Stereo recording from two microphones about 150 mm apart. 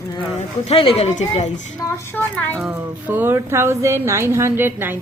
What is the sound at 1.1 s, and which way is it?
Speech, 50° left (ahead or behind).